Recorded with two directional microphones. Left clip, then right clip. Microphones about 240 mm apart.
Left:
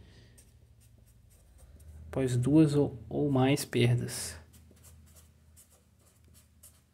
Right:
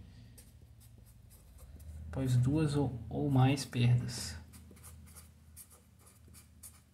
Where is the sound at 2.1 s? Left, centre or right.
Left.